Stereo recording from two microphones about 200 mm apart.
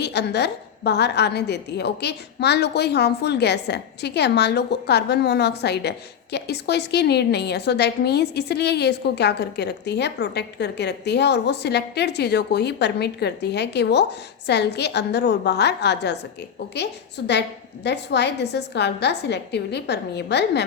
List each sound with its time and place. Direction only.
0.0 s a woman's voice: 55° left (ahead or behind)